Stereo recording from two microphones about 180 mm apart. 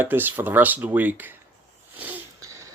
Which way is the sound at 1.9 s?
10° right (ahead or behind).